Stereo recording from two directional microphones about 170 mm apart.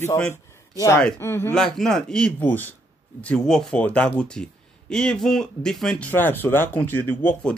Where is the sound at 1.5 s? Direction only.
5° left (ahead or behind).